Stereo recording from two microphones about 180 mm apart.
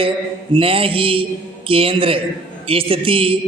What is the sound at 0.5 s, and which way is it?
A man's voice, 30° right (ahead or behind).